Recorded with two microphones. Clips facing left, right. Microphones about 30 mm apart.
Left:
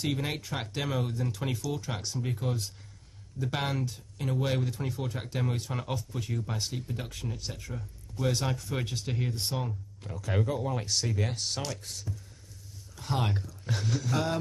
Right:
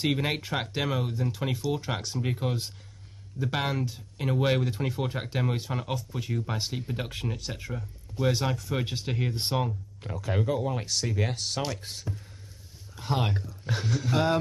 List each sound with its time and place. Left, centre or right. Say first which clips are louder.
0.0 s speech: right 4 dB; right
0.6 s speech: right 3 dB; centre
2.2 s speech: right 2 dB; right
3.3 s speech: right 3 dB; centre
4.2 s speech: right 4 dB; right
5.8 s speech: right 2 dB; centre
6.4 s speech: right 3 dB; right
7.5 s speech: right 4 dB; right
8.5 s speech: right 3 dB; centre
8.8 s speech: right 3 dB; right
10.4 s speech: right 4 dB; centre
10.9 s speech: right 2 dB; centre
11.8 s speech: right 3 dB; right
12.9 s speech: right 2 dB; centre